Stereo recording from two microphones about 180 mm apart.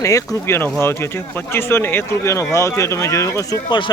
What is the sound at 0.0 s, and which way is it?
Speech, 15° left (ahead or behind).